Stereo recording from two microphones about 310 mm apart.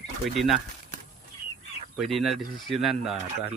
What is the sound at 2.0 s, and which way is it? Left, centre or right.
Speech, centre.